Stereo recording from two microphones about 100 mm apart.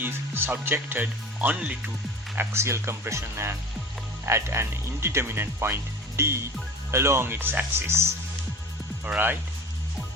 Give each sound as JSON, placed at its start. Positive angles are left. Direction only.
{"t": 0.0, "sound": "speech", "side_deg": -20}
{"t": 9.0, "sound": "speech", "side_deg": -20}